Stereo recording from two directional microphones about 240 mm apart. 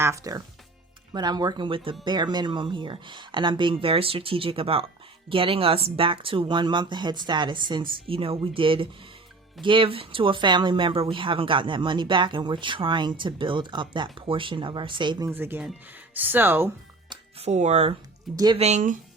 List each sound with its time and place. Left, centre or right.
0.0 s speech: centre
17.3 s speech: right